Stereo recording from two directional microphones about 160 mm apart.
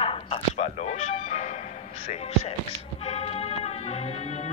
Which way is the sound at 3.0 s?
40° left (ahead or behind).